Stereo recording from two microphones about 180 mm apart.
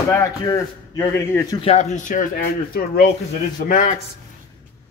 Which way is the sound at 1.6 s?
35° left (ahead or behind).